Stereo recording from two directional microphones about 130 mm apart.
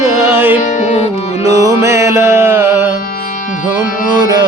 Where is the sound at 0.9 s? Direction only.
60° left (ahead or behind).